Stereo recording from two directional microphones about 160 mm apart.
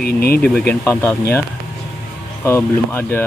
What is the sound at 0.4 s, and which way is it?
Speech, 10° left (ahead or behind).